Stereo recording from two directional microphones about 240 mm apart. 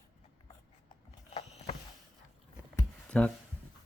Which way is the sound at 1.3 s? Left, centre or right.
Left.